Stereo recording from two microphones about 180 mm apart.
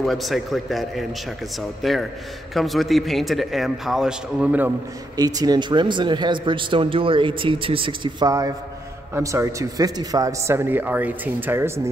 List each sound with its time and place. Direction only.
0.0 s speech: centre (ahead or behind)
5.1 s a man's voice: 20° right (ahead or behind)